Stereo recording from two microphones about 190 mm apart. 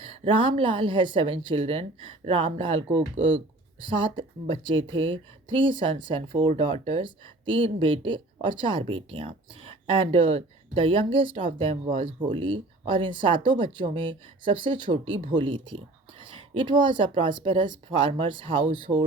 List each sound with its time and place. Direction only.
0.0 s speech: 30° right (ahead or behind)